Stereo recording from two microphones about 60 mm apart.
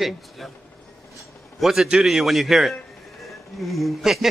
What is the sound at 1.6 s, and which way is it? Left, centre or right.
A man's voice, centre.